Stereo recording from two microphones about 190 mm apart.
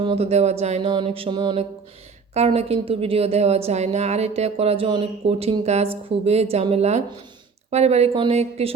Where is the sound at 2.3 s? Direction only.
35° right (ahead or behind).